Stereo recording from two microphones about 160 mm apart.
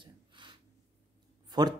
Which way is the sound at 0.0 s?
30° right (ahead or behind).